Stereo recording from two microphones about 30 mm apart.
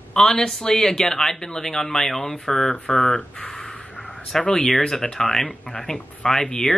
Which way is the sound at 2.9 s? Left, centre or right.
Left.